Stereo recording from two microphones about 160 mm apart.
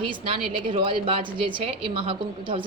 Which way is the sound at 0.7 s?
35° right (ahead or behind).